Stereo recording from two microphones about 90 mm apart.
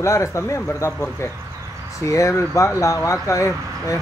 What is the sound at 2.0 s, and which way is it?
Speech, 35° left (ahead or behind).